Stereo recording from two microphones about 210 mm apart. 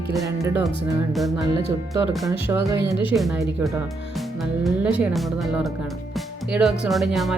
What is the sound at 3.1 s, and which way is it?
Speech, centre (ahead or behind).